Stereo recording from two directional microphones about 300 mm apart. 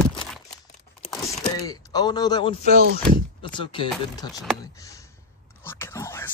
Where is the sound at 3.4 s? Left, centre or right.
Centre.